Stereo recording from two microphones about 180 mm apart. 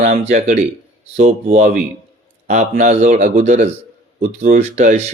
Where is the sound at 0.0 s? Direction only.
40° right (ahead or behind).